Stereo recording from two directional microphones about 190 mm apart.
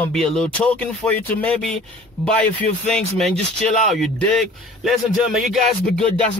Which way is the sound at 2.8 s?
Centre (ahead or behind).